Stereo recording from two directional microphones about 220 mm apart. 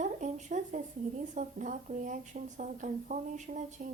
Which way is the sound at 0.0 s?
35° right (ahead or behind).